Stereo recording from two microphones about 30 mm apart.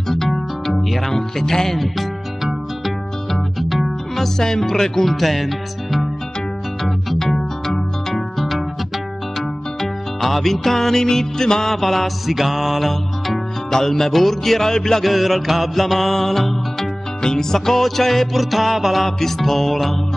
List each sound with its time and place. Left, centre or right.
0.3 s music: centre
1.1 s speech: centre
2.8 s music: centre
4.2 s speech: centre
6.8 s music: centre
7.2 s music: centre
8.1 s music: centre
9.8 s music: centre
11.7 s music: centre
13.7 s speech: centre
15.1 s music: centre
17.2 s speech: centre
18.3 s music: centre
19.0 s speech: centre